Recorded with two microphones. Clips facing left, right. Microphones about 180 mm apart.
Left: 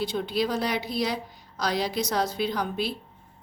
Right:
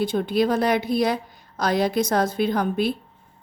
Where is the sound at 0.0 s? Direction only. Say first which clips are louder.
Right 6 dB; 50° right (ahead or behind).